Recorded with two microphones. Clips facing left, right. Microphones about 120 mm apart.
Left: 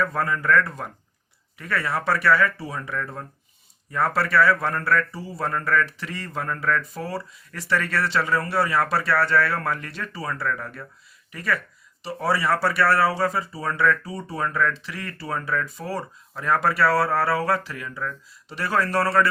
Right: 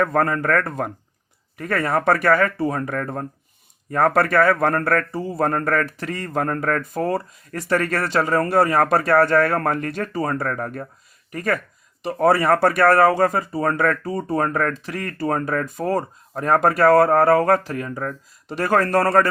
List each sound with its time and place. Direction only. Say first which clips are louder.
0.0 s speech: right 5 dB; 50° right (ahead or behind)